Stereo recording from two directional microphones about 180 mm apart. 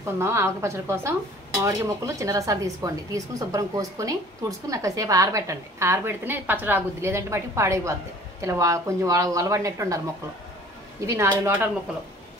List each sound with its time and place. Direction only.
0.0 s speech: 15° right (ahead or behind)
11.1 s speech: 15° right (ahead or behind)